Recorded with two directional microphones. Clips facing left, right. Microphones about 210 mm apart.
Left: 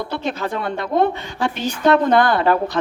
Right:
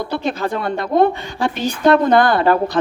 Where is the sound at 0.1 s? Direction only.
35° right (ahead or behind).